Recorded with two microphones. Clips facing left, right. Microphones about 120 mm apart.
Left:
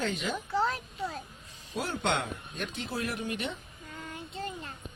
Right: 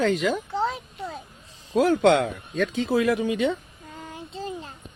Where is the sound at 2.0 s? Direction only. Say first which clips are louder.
Right 8 dB; 90° right.